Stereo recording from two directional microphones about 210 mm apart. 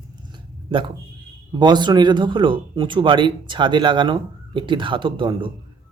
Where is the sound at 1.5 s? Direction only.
20° right (ahead or behind).